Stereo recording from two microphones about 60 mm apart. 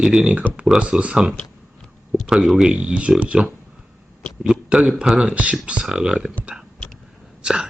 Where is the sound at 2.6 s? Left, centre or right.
Centre.